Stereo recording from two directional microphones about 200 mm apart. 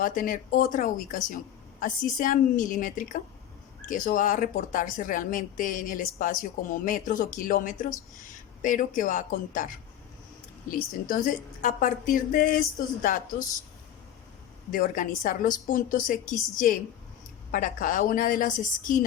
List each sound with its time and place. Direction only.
0.0 s speech: 40° left (ahead or behind)
11.1 s speech: 40° left (ahead or behind)
14.7 s speech: 40° left (ahead or behind)
17.5 s speech: 40° left (ahead or behind)